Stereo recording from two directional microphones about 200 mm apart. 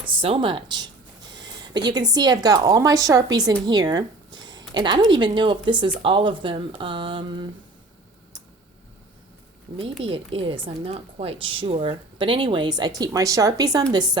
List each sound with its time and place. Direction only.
0.0 s a woman's voice: 25° right (ahead or behind)
10.0 s a woman's voice: 25° right (ahead or behind)